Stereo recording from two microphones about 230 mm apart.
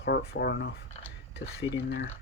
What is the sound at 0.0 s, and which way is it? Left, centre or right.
Speech, left.